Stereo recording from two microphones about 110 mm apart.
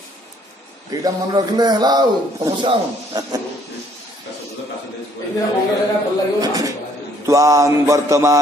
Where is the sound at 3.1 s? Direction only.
35° right (ahead or behind).